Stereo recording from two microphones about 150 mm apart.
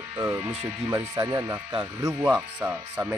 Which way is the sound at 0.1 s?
20° right (ahead or behind).